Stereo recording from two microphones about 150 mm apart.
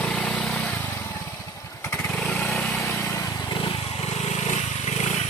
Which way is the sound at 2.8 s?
20° left (ahead or behind).